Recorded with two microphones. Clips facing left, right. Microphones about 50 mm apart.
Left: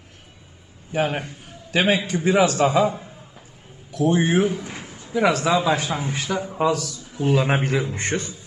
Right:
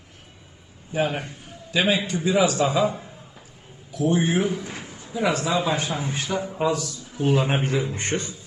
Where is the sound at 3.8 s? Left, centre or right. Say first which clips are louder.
Left 2 dB; left.